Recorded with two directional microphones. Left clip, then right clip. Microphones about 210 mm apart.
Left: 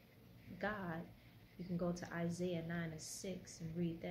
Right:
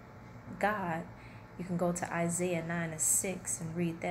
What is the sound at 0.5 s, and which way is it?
A woman's voice, 5° left (ahead or behind).